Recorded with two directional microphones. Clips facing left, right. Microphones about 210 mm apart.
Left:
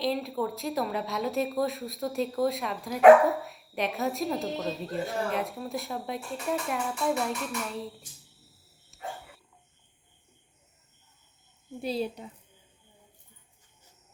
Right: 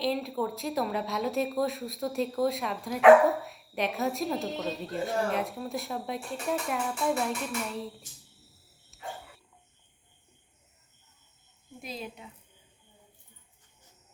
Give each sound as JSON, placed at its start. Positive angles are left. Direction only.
{"t": 0.0, "sound": "speech", "side_deg": 0}
{"t": 11.8, "sound": "speech", "side_deg": 35}